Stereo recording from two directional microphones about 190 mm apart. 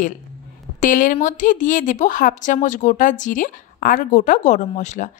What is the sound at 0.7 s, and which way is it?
A woman's voice, 45° left (ahead or behind).